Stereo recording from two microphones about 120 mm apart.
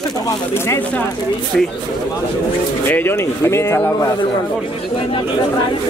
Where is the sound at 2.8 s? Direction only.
15° left (ahead or behind).